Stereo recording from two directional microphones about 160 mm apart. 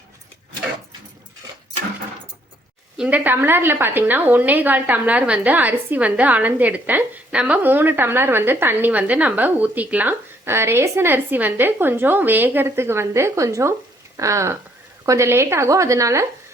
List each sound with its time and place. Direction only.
3.0 s a woman's voice: 10° right (ahead or behind)